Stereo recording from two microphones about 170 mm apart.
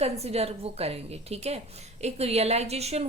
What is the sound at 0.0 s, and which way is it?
A woman's voice, 35° right (ahead or behind).